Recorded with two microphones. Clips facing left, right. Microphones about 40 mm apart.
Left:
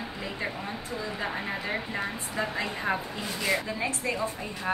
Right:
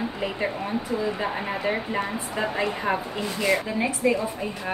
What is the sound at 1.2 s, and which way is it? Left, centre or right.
A woman's voice, centre.